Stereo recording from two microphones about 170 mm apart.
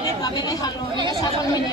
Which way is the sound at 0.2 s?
25° left (ahead or behind).